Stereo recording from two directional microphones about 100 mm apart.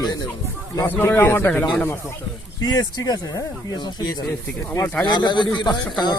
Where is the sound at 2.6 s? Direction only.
35° left (ahead or behind).